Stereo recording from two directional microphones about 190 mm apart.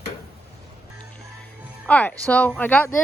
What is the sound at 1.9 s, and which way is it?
Speech, 5° left (ahead or behind).